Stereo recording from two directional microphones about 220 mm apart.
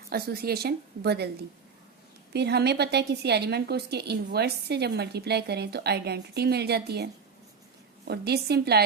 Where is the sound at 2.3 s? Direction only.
50° right (ahead or behind).